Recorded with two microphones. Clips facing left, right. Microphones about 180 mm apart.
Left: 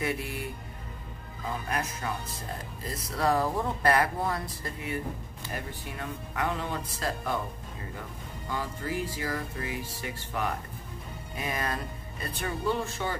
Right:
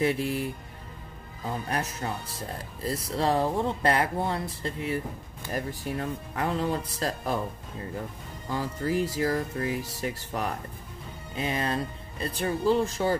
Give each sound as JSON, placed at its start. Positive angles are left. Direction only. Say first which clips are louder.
{"t": 0.0, "sound": "music", "louder": "right 6 dB", "side_deg": -30}
{"t": 2.0, "sound": "music", "louder": "right 1 dB", "side_deg": -30}
{"t": 2.9, "sound": "speech", "louder": "right 1 dB", "side_deg": -30}
{"t": 5.5, "sound": "music", "louder": "right 7 dB", "side_deg": -40}
{"t": 8.5, "sound": "music", "louder": "right 5 dB", "side_deg": -40}